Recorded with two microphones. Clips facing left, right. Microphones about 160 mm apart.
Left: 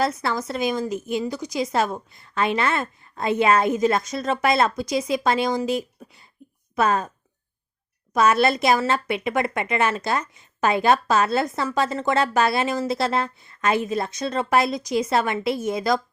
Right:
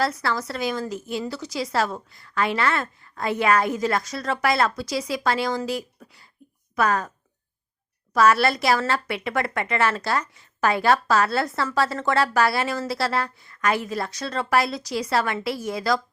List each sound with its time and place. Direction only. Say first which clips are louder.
0.0 s a woman's voice: left 1 dB; 20° left (ahead or behind)
8.1 s a woman's voice: even; 20° left (ahead or behind)